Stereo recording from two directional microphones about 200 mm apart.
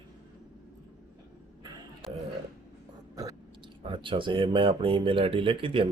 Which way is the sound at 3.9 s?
25° right (ahead or behind).